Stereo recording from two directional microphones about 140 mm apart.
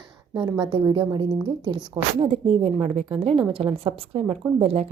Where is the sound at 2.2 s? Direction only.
45° right (ahead or behind).